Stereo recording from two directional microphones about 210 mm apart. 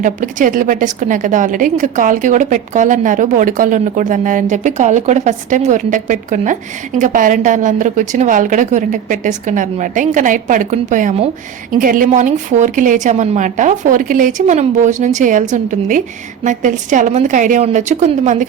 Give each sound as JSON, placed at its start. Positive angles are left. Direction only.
{"t": 0.0, "sound": "a woman's voice", "side_deg": -40}